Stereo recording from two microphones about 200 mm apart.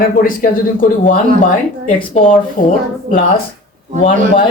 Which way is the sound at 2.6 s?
40° left (ahead or behind).